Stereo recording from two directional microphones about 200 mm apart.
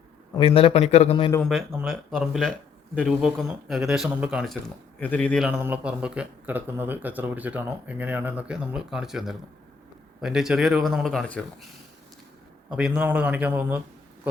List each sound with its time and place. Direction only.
0.3 s a man's voice: 25° left (ahead or behind)
1.3 s speech: 5° left (ahead or behind)
4.9 s a man's voice: 5° left (ahead or behind)
12.7 s a man's voice: 5° right (ahead or behind)